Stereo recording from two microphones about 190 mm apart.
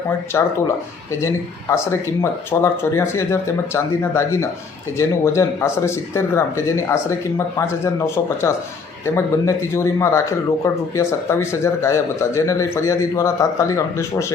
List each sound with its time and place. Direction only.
0.3 s speech: 15° left (ahead or behind)
1.7 s speech: 15° left (ahead or behind)